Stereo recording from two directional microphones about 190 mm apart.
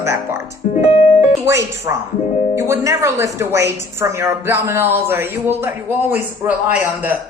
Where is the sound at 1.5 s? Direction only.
15° right (ahead or behind).